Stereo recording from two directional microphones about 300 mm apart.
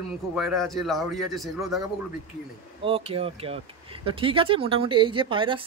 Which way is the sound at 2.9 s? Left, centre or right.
Centre.